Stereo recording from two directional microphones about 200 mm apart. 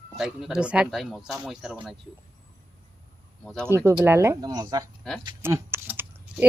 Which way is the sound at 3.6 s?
15° right (ahead or behind).